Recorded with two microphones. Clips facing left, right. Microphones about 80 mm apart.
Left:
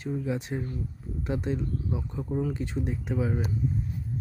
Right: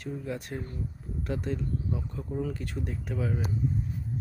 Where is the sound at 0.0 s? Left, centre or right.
Centre.